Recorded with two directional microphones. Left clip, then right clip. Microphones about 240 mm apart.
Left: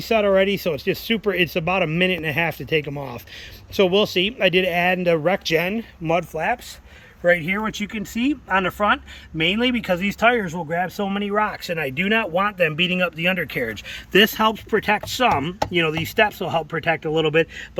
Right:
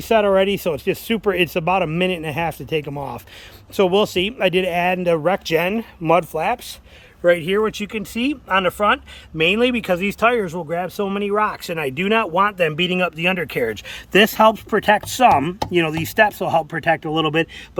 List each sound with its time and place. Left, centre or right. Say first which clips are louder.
0.1 s speech: right 2 dB; centre
6.0 s speech: right 4 dB; centre